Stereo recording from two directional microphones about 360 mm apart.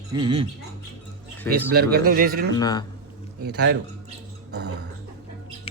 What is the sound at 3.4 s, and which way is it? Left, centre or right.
Speech, right.